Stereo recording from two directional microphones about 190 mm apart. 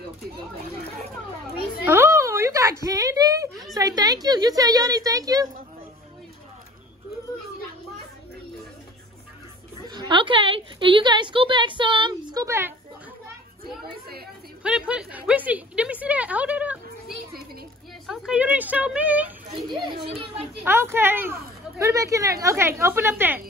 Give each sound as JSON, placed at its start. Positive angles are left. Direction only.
{"t": 1.9, "sound": "a woman's voice", "side_deg": -15}
{"t": 9.8, "sound": "a woman's voice", "side_deg": -25}
{"t": 14.6, "sound": "speech", "side_deg": -5}
{"t": 18.0, "sound": "a woman's voice", "side_deg": 0}
{"t": 19.5, "sound": "a woman's voice", "side_deg": -25}
{"t": 20.6, "sound": "speech", "side_deg": -10}